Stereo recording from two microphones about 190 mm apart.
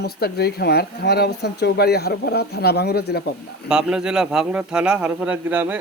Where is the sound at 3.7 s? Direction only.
5° right (ahead or behind).